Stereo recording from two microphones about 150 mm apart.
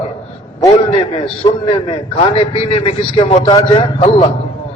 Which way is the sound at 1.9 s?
35° left (ahead or behind).